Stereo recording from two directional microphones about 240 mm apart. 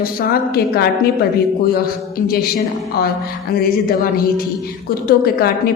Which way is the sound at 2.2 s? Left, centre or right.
Left.